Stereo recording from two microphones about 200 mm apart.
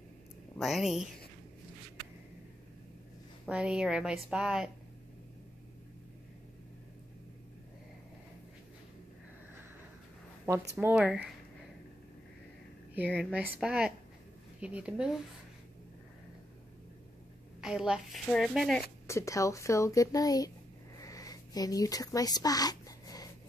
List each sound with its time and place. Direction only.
0.6 s a woman's voice: centre (ahead or behind)
3.4 s a woman's voice: 5° right (ahead or behind)
10.8 s a woman's voice: 5° right (ahead or behind)
13.1 s a woman's voice: centre (ahead or behind)
17.6 s a woman's voice: 5° right (ahead or behind)
19.0 s speech: 15° left (ahead or behind)
21.0 s a sound: 15° left (ahead or behind)